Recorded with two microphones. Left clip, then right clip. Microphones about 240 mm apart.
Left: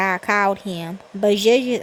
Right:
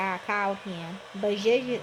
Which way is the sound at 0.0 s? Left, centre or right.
Left.